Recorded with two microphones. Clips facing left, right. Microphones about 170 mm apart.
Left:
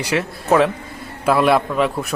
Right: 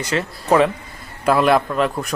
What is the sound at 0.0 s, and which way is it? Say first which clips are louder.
A man's voice: left 2 dB; 10° left (ahead or behind).